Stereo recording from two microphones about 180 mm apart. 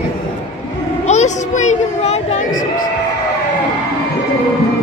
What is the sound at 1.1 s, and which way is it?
Speech, 40° left (ahead or behind).